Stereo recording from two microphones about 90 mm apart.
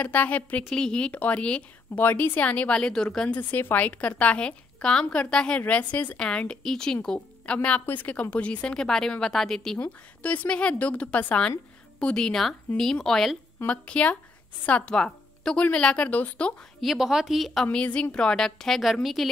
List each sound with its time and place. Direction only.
0.0 s a woman's voice: 15° left (ahead or behind)
3.3 s a woman's voice: 20° left (ahead or behind); by 9.8 s 5° left (ahead or behind)
9.8 s a woman's voice: 15° left (ahead or behind)
13.7 s a woman's voice: 15° left (ahead or behind)
16.8 s speech: 5° right (ahead or behind)
17.6 s a woman's voice: 15° left (ahead or behind)